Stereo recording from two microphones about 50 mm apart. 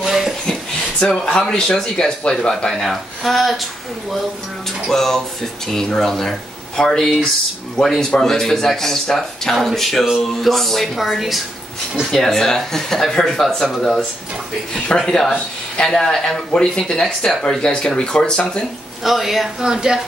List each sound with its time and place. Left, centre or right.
0.0 s a sound: centre
1.1 s speech: centre
2.7 s speech: centre
4.9 s speech: centre
12.1 s speech: centre
15.3 s speech: left
15.9 s speech: centre
19.0 s speech: centre